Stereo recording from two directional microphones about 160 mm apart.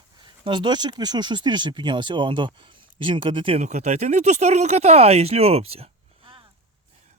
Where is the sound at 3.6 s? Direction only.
45° right (ahead or behind).